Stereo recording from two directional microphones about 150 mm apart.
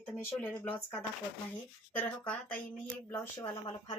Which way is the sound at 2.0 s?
10° left (ahead or behind).